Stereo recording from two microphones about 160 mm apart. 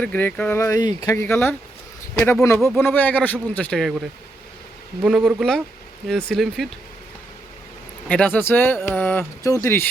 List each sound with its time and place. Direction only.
0.0 s speech: 10° left (ahead or behind)
8.0 s speech: 5° left (ahead or behind)